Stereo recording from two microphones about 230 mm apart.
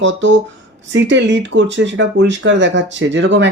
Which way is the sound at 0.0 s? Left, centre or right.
Right.